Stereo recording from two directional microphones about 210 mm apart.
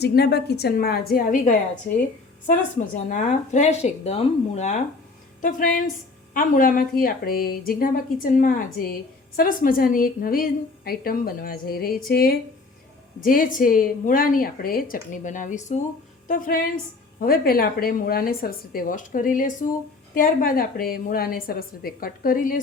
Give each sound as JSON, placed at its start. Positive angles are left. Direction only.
{"t": 0.0, "sound": "a woman's voice", "side_deg": 50}